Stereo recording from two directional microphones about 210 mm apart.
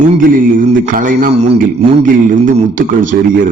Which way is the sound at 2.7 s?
40° right (ahead or behind).